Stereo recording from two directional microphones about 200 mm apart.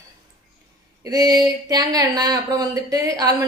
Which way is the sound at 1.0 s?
20° right (ahead or behind).